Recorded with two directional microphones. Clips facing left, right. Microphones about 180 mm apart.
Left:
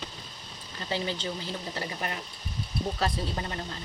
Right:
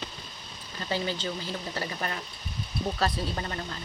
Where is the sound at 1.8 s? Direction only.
20° left (ahead or behind).